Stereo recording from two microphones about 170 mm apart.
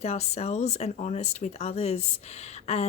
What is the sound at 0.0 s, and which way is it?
Speech, 40° left (ahead or behind).